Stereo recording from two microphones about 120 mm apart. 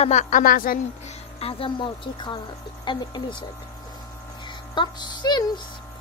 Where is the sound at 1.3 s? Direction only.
50° left (ahead or behind).